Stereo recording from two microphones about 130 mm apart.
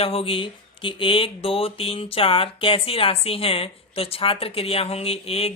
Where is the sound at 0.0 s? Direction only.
50° left (ahead or behind).